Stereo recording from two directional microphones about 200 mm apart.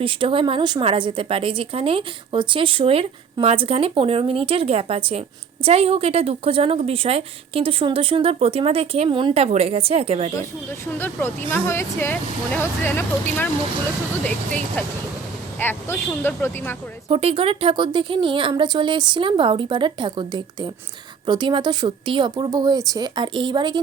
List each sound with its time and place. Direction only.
0.0 s a woman's voice: 25° right (ahead or behind)
10.9 s speech: 10° left (ahead or behind)
15.5 s speech: 10° left (ahead or behind)
17.1 s a woman's voice: 30° right (ahead or behind)